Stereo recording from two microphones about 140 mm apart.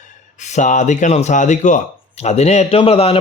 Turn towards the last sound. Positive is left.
turn(degrees=45)  # may be behind; listen again after turning